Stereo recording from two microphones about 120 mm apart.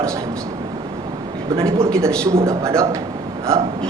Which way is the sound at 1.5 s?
25° right (ahead or behind).